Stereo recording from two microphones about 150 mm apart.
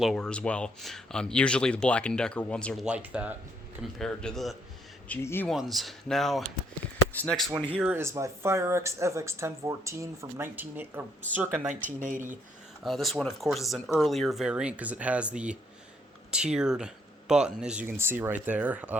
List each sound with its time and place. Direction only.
0.0 s speech: centre (ahead or behind)
2.8 s speech: 10° right (ahead or behind)
3.9 s speech: 5° left (ahead or behind)
5.5 s speech: centre (ahead or behind)
7.7 s speech: 10° right (ahead or behind)
11.9 s speech: 60° right (ahead or behind)
12.8 s speech: centre (ahead or behind)